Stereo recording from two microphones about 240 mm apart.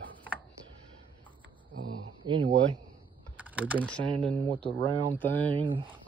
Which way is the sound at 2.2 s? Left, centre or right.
Centre.